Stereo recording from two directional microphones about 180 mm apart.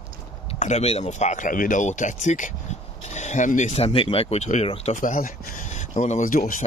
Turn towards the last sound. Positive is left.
turn(degrees=45)  # may be behind; listen again after turning